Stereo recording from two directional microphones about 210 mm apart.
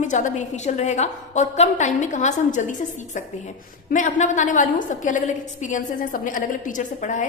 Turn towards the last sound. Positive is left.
turn(degrees=35)  # may be behind; listen again after turning